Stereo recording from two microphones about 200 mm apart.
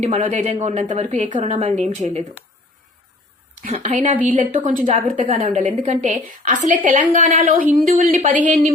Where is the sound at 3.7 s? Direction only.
30° right (ahead or behind).